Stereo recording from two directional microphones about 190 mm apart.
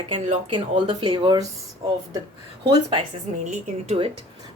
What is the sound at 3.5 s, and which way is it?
Speech, 35° right (ahead or behind).